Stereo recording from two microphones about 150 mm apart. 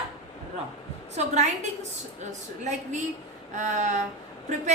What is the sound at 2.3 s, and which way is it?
A woman's voice, 50° right (ahead or behind).